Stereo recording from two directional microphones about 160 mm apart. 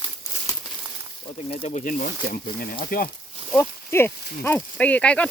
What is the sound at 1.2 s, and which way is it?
Speech, 35° left (ahead or behind).